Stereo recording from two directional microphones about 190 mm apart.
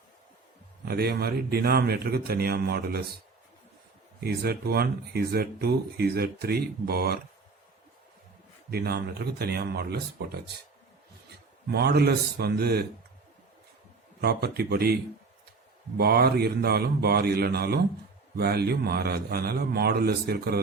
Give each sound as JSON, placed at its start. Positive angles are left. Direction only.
{"t": 0.9, "sound": "speech", "side_deg": -55}
{"t": 4.2, "sound": "speech", "side_deg": -55}
{"t": 8.7, "sound": "speech", "side_deg": -55}
{"t": 11.7, "sound": "speech", "side_deg": -55}
{"t": 14.2, "sound": "speech", "side_deg": -55}
{"t": 16.0, "sound": "speech", "side_deg": -55}